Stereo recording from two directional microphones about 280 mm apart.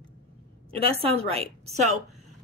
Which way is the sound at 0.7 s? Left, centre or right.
Right.